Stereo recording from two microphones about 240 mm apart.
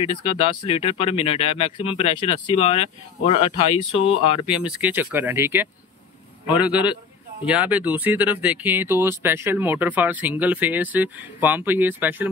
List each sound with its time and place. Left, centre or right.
0.0 s speech: left
4.5 s speech: centre